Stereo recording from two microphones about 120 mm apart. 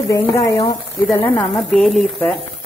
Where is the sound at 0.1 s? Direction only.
25° left (ahead or behind).